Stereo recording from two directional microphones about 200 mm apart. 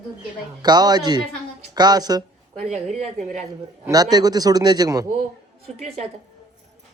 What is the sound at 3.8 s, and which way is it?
A man's voice, 20° right (ahead or behind).